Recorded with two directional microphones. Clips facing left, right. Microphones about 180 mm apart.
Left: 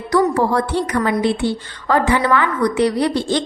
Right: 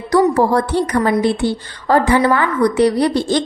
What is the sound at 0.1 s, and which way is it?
A woman's voice, 35° right (ahead or behind).